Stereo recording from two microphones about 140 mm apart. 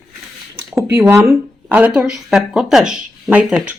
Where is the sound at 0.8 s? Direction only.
20° right (ahead or behind).